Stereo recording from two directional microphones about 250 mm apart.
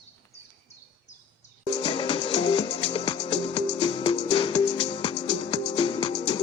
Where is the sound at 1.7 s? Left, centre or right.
Centre.